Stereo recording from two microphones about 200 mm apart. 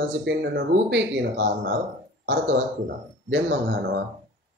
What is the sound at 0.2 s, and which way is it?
Speech, 60° right (ahead or behind).